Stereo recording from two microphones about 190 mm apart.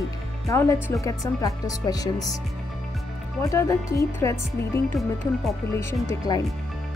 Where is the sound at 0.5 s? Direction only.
15° left (ahead or behind).